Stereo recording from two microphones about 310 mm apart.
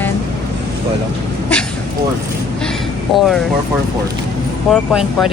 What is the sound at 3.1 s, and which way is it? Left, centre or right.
Speech, centre.